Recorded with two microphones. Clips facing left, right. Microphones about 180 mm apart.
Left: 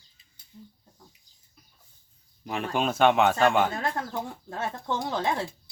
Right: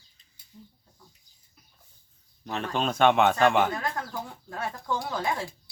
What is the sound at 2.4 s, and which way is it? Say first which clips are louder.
A man's voice: left 1 dB; 10° left (ahead or behind).